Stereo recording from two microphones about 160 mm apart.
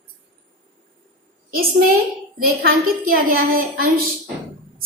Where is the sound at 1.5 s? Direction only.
65° right (ahead or behind).